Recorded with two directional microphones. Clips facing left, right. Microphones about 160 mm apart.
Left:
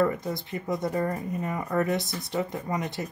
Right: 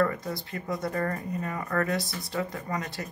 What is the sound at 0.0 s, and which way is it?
Speech, 20° left (ahead or behind).